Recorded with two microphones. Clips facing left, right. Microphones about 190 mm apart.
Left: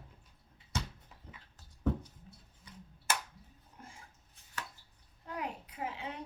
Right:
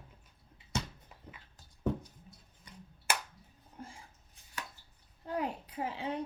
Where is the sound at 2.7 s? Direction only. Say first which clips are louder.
Right 1 dB; 10° right (ahead or behind).